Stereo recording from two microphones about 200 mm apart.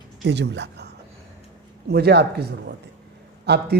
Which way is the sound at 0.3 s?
60° right (ahead or behind).